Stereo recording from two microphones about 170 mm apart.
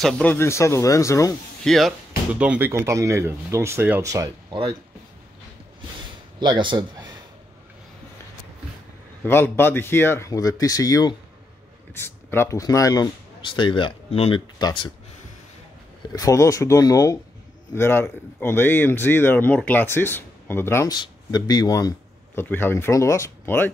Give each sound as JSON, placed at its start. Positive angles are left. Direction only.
{"t": 0.0, "sound": "a man's voice", "side_deg": 10}
{"t": 1.6, "sound": "speech", "side_deg": 0}
{"t": 6.4, "sound": "a man's voice", "side_deg": -25}
{"t": 9.2, "sound": "a man's voice", "side_deg": 15}
{"t": 16.1, "sound": "a man's voice", "side_deg": 20}